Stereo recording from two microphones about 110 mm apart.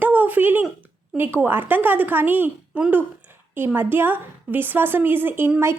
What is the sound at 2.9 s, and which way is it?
A woman's voice, 20° right (ahead or behind).